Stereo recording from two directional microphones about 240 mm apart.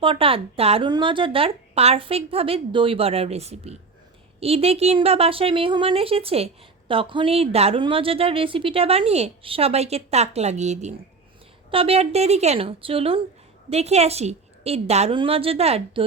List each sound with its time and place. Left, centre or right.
0.0 s a woman's voice: right